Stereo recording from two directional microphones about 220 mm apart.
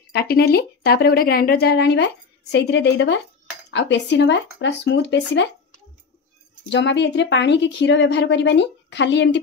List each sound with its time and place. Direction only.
0.1 s speech: 45° left (ahead or behind)
6.7 s speech: 55° left (ahead or behind)